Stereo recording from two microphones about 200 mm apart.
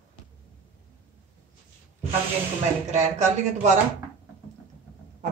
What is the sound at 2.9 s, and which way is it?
Speech, 35° right (ahead or behind).